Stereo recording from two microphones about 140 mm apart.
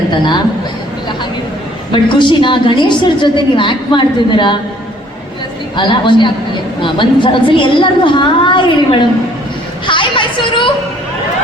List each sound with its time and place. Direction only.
1.9 s a woman's voice: 35° left (ahead or behind)
5.7 s a woman's voice: 35° left (ahead or behind)
9.8 s a sound: 35° left (ahead or behind)